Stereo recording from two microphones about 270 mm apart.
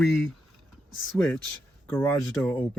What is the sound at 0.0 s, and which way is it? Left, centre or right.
Speech, centre.